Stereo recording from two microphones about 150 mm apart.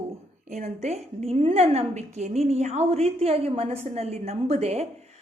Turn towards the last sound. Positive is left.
turn(degrees=-45)  # may be behind; listen again after turning